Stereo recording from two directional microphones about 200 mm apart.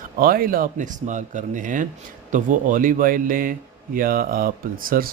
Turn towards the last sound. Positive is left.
turn(degrees=-45)  # may be behind; listen again after turning